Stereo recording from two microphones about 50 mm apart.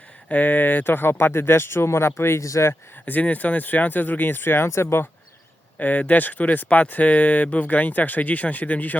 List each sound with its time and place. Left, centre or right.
0.3 s speech: left
3.1 s speech: left
5.8 s speech: left